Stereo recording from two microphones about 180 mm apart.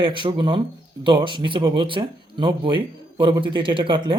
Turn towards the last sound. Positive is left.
turn(degrees=-30)  # may be behind; listen again after turning